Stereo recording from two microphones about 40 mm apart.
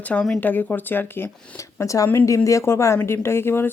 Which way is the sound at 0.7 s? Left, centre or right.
Left.